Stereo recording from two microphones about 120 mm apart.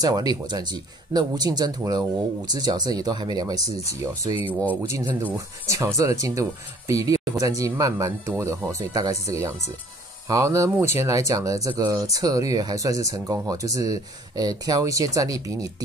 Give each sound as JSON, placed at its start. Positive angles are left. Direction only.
{"t": 0.0, "sound": "speech", "side_deg": -35}
{"t": 4.5, "sound": "speech", "side_deg": 15}
{"t": 4.8, "sound": "speech", "side_deg": -25}